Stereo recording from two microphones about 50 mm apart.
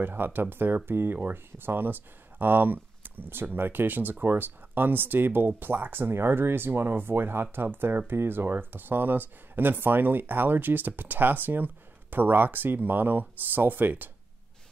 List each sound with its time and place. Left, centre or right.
0.0 s speech: right